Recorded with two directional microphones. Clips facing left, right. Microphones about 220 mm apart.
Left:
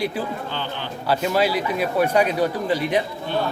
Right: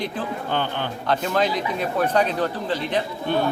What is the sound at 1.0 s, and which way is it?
Speech, 5° left (ahead or behind).